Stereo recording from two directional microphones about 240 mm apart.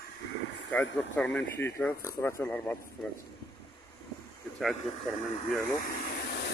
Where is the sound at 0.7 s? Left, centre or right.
Centre.